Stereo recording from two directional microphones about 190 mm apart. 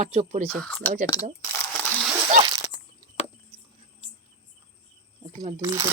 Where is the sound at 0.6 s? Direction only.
Centre (ahead or behind).